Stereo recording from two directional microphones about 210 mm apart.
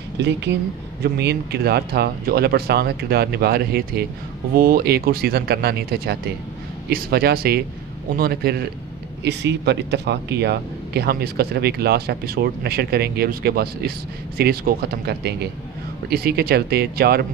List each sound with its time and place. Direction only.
0.2 s speech: 55° right (ahead or behind)